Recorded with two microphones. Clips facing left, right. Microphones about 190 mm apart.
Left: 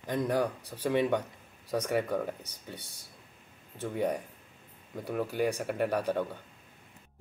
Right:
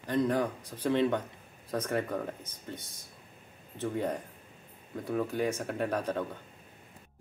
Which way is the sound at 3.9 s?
10° left (ahead or behind).